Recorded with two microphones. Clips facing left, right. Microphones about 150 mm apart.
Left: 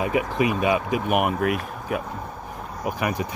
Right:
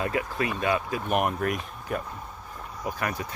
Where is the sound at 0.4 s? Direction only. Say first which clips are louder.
Left 5 dB; 15° left (ahead or behind).